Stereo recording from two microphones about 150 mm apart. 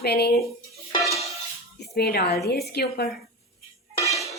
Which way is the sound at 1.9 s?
90° left.